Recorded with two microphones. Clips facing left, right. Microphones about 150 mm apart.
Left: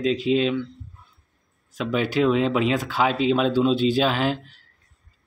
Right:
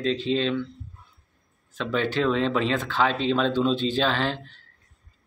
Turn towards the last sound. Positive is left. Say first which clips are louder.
# left 3 dB
turn(degrees=10)  # may be behind; listen again after turning